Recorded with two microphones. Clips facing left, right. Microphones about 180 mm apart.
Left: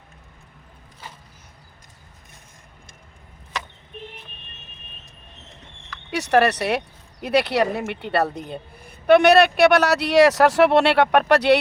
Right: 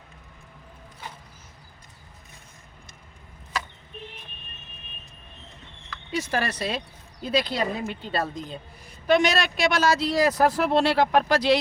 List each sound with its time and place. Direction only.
6.1 s speech: 70° left (ahead or behind)